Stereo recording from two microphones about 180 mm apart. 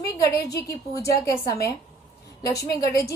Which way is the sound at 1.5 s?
20° left (ahead or behind).